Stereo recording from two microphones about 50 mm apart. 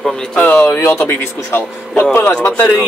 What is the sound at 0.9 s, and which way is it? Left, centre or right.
Speech, left.